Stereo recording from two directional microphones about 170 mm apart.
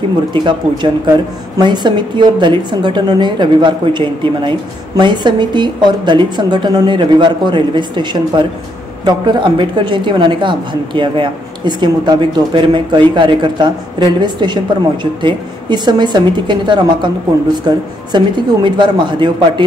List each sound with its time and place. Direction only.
1.6 s a woman's voice: 25° right (ahead or behind)